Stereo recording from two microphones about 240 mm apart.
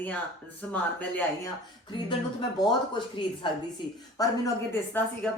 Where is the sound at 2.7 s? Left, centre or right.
Centre.